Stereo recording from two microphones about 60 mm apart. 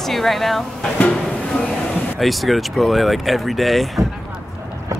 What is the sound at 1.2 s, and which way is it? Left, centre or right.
Music, centre.